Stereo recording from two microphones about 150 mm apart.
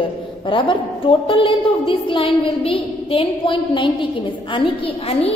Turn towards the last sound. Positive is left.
turn(degrees=35)  # may be behind; listen again after turning